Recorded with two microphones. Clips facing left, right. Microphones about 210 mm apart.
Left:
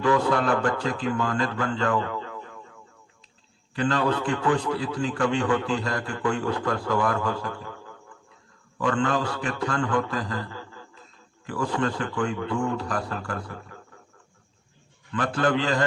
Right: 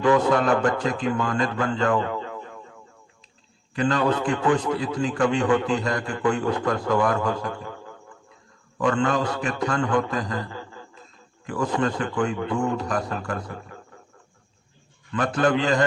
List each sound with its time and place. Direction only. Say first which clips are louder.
0.0 s a man's voice: right 3 dB; 20° right (ahead or behind)
3.8 s a man's voice: right 2 dB; 20° right (ahead or behind)
15.4 s a man's voice: right 3 dB; 20° right (ahead or behind)